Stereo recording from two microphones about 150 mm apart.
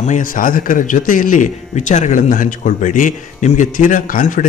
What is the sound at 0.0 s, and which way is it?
A man's voice, 60° left (ahead or behind).